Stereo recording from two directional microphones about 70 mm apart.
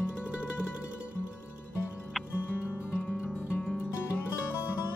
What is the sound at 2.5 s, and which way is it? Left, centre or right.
Music, left.